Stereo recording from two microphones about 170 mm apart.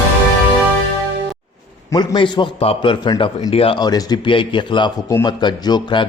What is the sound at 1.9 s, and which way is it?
A man's voice, 25° left (ahead or behind).